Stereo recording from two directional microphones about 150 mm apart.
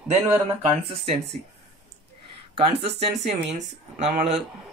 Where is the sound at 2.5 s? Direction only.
40° right (ahead or behind).